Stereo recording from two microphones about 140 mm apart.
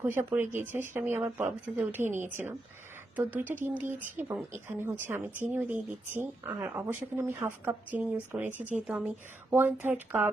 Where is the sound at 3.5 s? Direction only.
15° right (ahead or behind).